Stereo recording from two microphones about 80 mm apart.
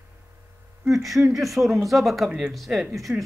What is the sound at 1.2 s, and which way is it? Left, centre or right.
Speech, centre.